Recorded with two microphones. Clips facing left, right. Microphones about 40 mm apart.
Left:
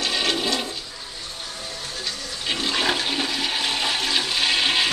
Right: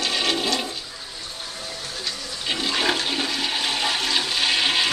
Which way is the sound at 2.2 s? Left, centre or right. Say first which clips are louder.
Even; centre.